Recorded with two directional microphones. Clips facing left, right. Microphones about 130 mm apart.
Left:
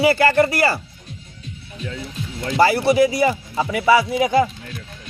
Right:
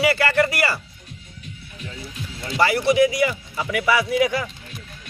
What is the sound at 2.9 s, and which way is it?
Speech, 30° left (ahead or behind).